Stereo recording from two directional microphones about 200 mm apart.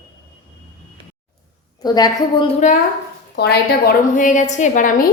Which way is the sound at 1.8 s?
20° left (ahead or behind).